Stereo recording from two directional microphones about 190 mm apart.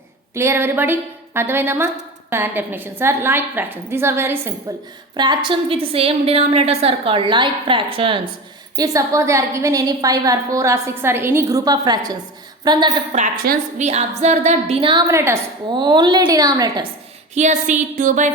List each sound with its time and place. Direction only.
0.3 s a woman's voice: 15° right (ahead or behind)
5.1 s a woman's voice: 25° right (ahead or behind)
13.1 s a woman's voice: 45° right (ahead or behind)
14.2 s a woman's voice: 35° right (ahead or behind); by 15.4 s 15° right (ahead or behind)
15.7 s a woman's voice: 25° right (ahead or behind)
17.3 s a sound: 40° right (ahead or behind)